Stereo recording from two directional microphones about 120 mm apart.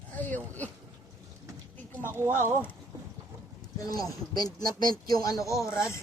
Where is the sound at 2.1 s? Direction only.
20° right (ahead or behind).